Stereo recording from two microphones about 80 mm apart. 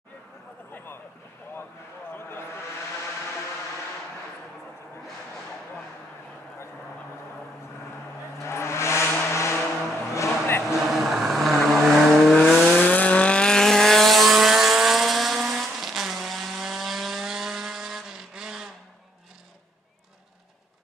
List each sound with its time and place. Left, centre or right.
2.1 s a sound: left
8.4 s vehicle: left
10.7 s vehicle: centre
12.7 s vehicle: centre